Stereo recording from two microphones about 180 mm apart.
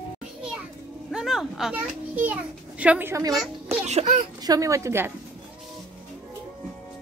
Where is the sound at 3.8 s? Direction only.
35° right (ahead or behind).